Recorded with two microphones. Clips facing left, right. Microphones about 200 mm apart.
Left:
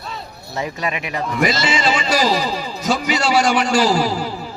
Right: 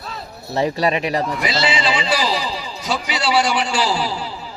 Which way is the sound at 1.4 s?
45° left (ahead or behind).